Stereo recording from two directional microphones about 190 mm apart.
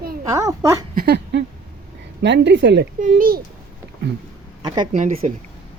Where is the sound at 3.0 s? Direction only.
50° right (ahead or behind).